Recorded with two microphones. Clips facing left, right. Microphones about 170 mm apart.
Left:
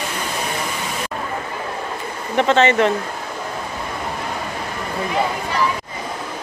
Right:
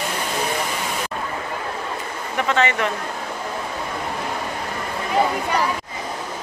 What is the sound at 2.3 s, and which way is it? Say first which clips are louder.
Speech: left 6 dB; 25° left (ahead or behind).